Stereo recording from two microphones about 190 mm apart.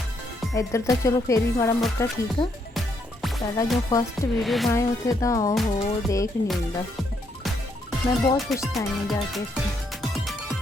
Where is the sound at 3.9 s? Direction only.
15° left (ahead or behind).